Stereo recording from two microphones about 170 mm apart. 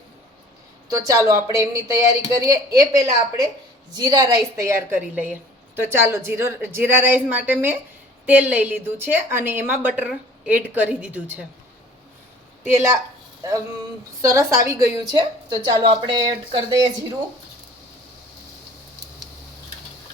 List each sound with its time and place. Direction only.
0.9 s a woman's voice: 20° right (ahead or behind)
4.6 s a woman's voice: 10° right (ahead or behind)
12.6 s a woman's voice: 15° right (ahead or behind)
14.2 s a woman's voice: 15° right (ahead or behind)